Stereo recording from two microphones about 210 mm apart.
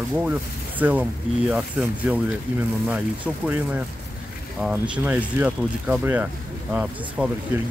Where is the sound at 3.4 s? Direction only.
10° right (ahead or behind).